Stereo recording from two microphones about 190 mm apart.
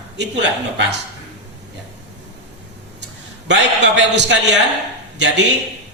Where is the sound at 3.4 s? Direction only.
65° right (ahead or behind).